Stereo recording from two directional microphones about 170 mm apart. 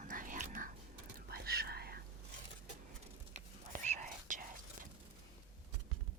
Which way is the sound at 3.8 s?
45° right (ahead or behind).